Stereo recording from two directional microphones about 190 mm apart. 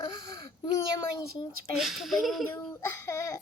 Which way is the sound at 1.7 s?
Centre (ahead or behind).